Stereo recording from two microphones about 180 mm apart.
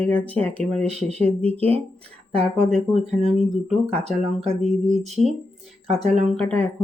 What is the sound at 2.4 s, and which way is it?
Speech, 40° right (ahead or behind).